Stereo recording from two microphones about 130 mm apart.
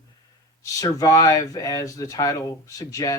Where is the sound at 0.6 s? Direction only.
25° left (ahead or behind).